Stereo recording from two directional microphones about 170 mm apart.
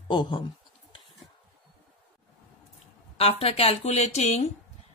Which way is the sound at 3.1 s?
35° left (ahead or behind).